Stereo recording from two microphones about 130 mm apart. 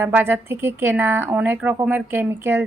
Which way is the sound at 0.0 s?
15° right (ahead or behind).